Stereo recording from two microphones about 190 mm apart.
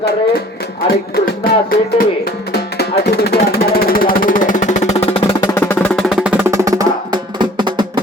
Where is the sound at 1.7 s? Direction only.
55° left (ahead or behind); by 5.5 s 25° left (ahead or behind).